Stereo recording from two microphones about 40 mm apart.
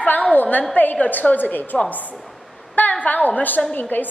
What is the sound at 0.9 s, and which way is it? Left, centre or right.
A woman's voice, left.